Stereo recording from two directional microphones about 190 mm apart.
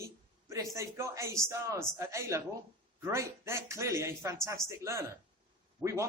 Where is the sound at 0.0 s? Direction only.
15° right (ahead or behind).